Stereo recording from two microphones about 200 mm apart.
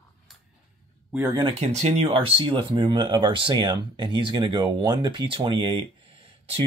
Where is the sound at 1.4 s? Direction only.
35° right (ahead or behind).